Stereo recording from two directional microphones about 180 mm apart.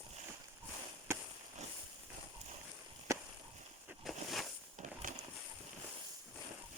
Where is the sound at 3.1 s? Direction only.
15° right (ahead or behind).